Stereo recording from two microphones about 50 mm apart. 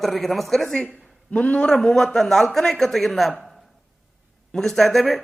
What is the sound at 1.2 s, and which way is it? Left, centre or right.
Speech, left.